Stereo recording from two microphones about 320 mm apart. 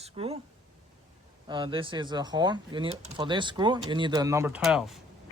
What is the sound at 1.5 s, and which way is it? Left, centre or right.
Speech, centre.